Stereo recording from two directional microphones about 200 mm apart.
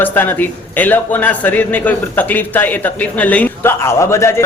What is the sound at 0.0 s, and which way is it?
A man's voice, 10° left (ahead or behind).